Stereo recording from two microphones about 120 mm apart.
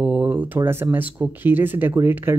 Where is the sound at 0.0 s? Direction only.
10° right (ahead or behind).